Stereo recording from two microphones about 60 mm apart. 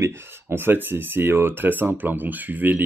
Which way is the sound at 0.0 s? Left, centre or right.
Right.